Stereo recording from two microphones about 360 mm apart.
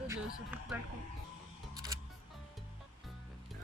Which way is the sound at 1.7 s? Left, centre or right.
Centre.